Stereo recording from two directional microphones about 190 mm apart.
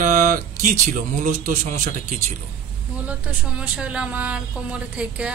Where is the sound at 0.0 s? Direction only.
45° right (ahead or behind).